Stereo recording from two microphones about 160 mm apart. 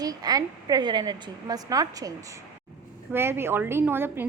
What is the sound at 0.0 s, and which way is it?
A woman's voice, 25° right (ahead or behind).